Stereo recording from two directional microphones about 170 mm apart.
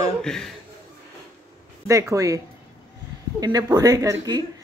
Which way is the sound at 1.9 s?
20° right (ahead or behind).